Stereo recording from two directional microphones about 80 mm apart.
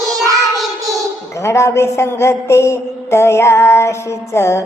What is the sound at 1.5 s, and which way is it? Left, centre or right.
A woman's voice, left.